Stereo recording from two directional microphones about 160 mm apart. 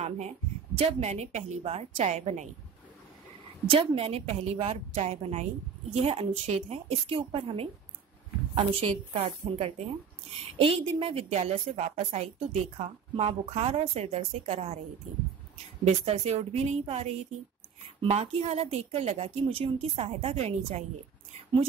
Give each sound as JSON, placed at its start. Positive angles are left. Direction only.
{"t": 0.7, "sound": "a woman's voice", "side_deg": -40}
{"t": 3.7, "sound": "a woman's voice", "side_deg": -35}
{"t": 15.8, "sound": "a woman's voice", "side_deg": -40}